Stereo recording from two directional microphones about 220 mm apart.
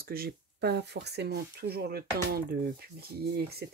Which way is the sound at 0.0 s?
45° right (ahead or behind).